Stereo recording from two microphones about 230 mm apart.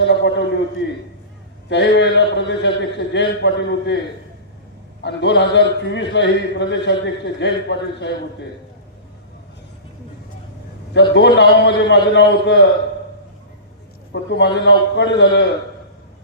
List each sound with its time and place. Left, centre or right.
0.0 s a man's voice: left
1.7 s a man's voice: left
5.0 s a man's voice: left
10.9 s a man's voice: left
14.1 s a man's voice: left